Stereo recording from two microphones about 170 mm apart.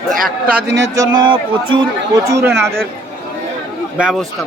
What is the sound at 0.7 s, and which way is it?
Speech, 90° right.